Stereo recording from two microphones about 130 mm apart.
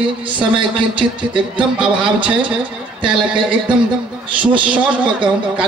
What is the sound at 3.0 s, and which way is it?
Speech, 40° right (ahead or behind).